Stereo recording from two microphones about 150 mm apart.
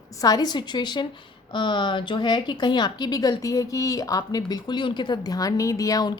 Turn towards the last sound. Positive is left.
turn(degrees=25)  # may be behind; listen again after turning